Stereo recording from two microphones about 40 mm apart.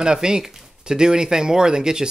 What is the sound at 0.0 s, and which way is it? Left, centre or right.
Speech, centre.